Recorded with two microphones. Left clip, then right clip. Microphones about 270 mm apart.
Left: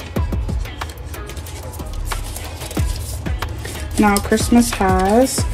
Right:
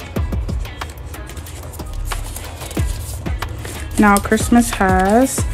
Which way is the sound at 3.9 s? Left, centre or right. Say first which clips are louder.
Right 2 dB; right.